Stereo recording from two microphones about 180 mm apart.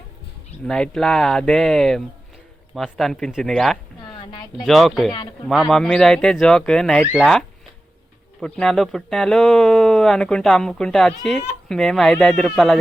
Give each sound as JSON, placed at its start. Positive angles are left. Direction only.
{"t": 0.7, "sound": "speech", "side_deg": 5}
{"t": 4.2, "sound": "speech", "side_deg": 25}
{"t": 4.6, "sound": "speech", "side_deg": 0}